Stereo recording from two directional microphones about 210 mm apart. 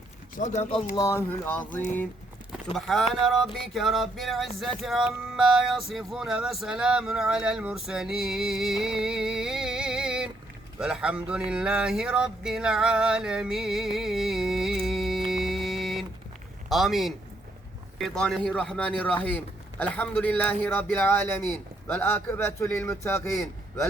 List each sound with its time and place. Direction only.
0.3 s speech: 35° left (ahead or behind)
0.9 s a man's voice: 15° left (ahead or behind)
2.7 s music: centre (ahead or behind)
19.8 s a man's voice: 5° left (ahead or behind)